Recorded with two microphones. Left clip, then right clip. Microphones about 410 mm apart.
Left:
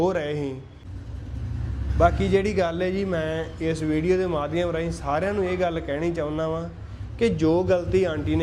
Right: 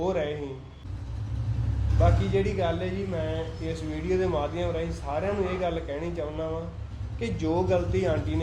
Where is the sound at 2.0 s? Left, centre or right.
Left.